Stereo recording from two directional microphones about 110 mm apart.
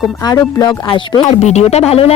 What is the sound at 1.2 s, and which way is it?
Speech, 90° left.